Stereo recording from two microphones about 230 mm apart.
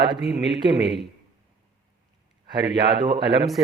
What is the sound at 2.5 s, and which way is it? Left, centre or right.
Speech, centre.